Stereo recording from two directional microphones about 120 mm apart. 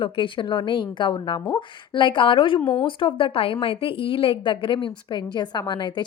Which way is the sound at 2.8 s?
45° left (ahead or behind).